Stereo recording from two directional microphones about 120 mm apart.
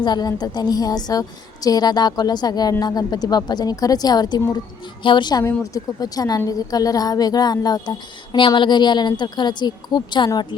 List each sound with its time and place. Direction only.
0.0 s a woman's voice: 35° left (ahead or behind)